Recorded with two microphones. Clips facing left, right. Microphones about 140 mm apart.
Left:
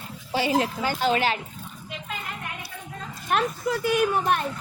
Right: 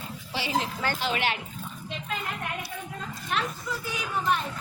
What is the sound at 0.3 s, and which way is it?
Speech, 50° left (ahead or behind).